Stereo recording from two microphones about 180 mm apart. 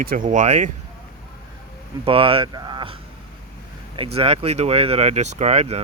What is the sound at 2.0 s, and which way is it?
Speech, 30° right (ahead or behind).